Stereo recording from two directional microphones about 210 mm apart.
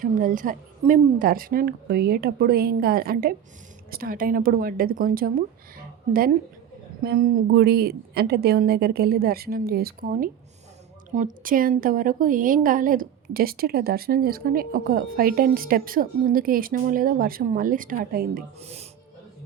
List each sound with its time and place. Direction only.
0.0 s a woman's voice: 40° right (ahead or behind)
7.0 s a woman's voice: 45° right (ahead or behind)
18.6 s speech: 30° right (ahead or behind)